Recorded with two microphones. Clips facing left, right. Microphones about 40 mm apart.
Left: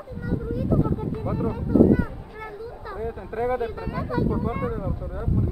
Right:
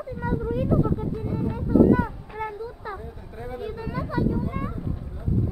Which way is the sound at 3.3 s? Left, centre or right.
Left.